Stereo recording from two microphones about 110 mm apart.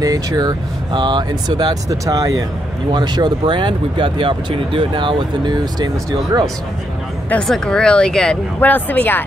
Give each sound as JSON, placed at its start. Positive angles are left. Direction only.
{"t": 0.0, "sound": "speech", "side_deg": -35}
{"t": 7.2, "sound": "speech", "side_deg": 5}
{"t": 8.5, "sound": "speech", "side_deg": 15}